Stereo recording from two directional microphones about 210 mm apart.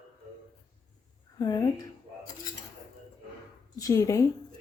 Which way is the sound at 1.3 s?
20° left (ahead or behind).